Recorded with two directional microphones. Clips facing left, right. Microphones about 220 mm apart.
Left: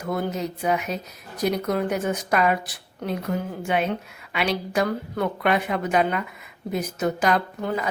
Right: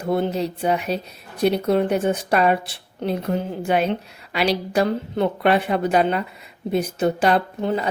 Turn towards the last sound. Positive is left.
turn(degrees=-30)  # may be behind; listen again after turning